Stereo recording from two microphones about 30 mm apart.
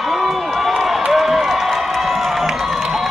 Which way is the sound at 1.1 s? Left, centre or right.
Centre.